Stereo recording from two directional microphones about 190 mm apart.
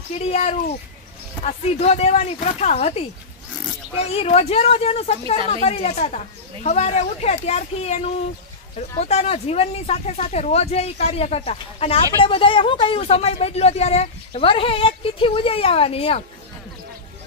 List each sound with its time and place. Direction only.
0.2 s speech: 35° left (ahead or behind)
4.1 s speech: 30° left (ahead or behind)